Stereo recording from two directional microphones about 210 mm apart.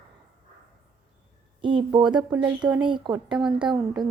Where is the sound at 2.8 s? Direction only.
20° right (ahead or behind).